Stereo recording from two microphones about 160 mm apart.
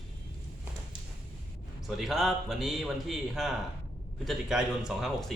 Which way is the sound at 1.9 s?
Centre (ahead or behind).